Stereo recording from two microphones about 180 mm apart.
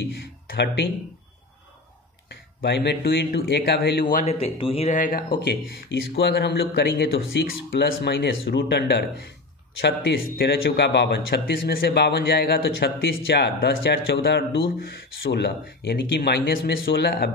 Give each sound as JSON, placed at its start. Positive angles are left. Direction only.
{"t": 2.2, "sound": "speech", "side_deg": 65}
{"t": 4.1, "sound": "speech", "side_deg": 40}
{"t": 4.9, "sound": "speech", "side_deg": 50}
{"t": 5.4, "sound": "a man's voice", "side_deg": 75}